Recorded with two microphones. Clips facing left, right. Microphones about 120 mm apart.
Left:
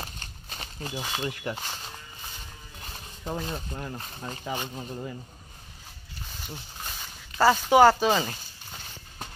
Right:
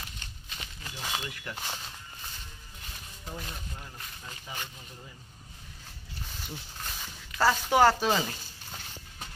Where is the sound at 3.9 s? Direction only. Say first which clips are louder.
Left 8 dB; 40° left (ahead or behind).